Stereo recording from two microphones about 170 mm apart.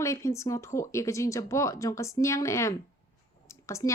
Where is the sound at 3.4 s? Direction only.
15° left (ahead or behind).